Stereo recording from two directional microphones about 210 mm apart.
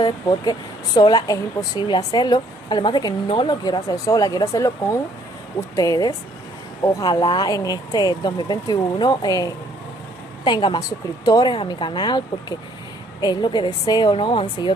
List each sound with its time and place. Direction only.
0.0 s speech: 20° left (ahead or behind)